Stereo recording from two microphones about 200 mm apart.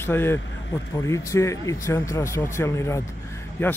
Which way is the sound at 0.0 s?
10° left (ahead or behind).